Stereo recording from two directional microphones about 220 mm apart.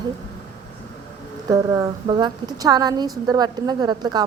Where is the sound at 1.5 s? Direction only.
15° right (ahead or behind).